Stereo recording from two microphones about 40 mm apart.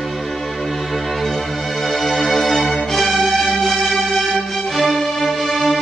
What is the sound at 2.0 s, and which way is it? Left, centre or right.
Music, centre.